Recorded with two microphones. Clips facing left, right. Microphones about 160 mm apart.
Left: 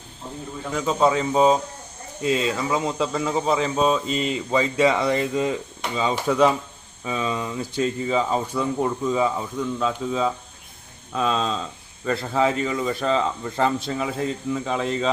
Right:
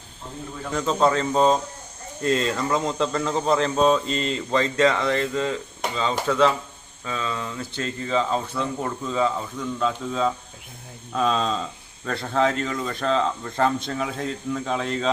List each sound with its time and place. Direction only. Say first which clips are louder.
0.7 s speech: left 1 dB; 5° left (ahead or behind)